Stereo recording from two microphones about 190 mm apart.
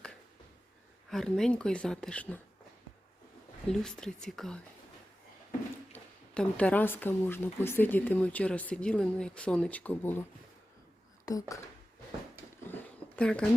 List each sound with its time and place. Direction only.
1.1 s speech: centre (ahead or behind)
3.7 s speech: 5° left (ahead or behind)
5.9 s speech: 5° left (ahead or behind)
11.3 s speech: 15° left (ahead or behind)
12.6 s a sound: 10° left (ahead or behind)